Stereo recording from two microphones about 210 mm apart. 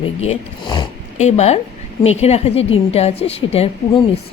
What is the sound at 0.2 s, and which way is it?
Speech, 25° left (ahead or behind).